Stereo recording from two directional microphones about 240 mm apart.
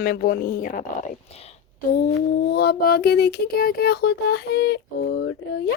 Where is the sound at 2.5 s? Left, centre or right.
Left.